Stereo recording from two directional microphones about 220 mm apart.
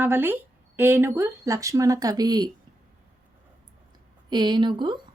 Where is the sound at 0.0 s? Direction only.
10° right (ahead or behind).